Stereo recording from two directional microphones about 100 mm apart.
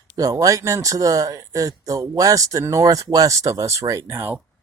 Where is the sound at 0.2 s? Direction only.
35° right (ahead or behind).